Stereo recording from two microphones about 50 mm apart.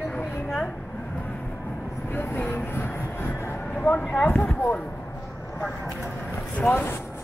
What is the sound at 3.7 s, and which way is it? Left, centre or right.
Speech, left.